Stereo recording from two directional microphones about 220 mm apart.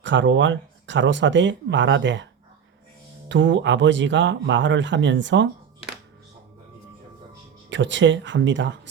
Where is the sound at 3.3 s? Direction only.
55° right (ahead or behind).